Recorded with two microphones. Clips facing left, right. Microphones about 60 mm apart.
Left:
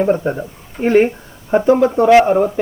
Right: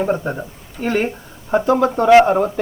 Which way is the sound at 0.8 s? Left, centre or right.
Left.